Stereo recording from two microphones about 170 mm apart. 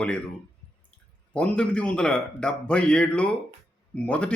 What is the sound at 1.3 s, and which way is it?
A man's voice, 5° left (ahead or behind).